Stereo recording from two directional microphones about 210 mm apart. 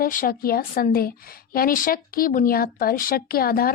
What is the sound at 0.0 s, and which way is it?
Speech, 40° left (ahead or behind).